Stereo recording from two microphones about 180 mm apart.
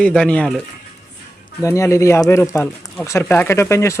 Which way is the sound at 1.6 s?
15° left (ahead or behind).